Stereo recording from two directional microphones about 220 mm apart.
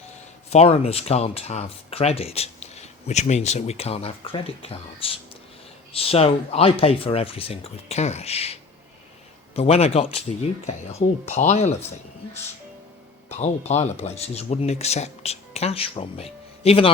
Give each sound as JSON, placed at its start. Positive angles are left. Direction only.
{"t": 0.5, "sound": "speech", "side_deg": 25}
{"t": 9.6, "sound": "speech", "side_deg": 30}
{"t": 11.3, "sound": "speech", "side_deg": 30}
{"t": 13.2, "sound": "speech", "side_deg": 30}